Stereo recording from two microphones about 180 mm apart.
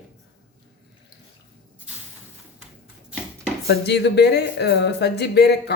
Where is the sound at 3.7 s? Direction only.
65° left (ahead or behind).